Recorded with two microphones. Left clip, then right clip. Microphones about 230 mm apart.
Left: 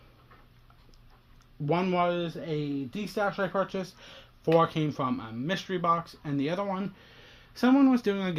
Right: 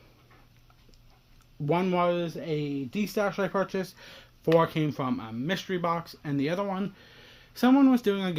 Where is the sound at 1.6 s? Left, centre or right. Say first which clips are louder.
Right 1 dB; right.